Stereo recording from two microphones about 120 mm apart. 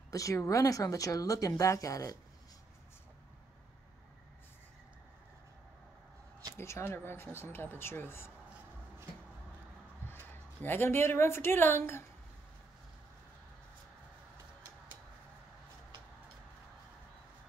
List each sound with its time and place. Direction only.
0.1 s speech: 25° left (ahead or behind)
6.5 s speech: 25° left (ahead or behind)
10.0 s speech: 15° left (ahead or behind)